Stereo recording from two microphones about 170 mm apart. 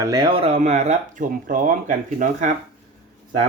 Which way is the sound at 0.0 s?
25° right (ahead or behind).